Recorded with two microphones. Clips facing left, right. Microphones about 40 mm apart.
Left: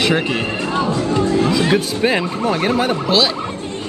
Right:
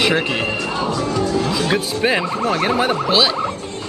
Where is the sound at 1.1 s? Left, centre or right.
Left.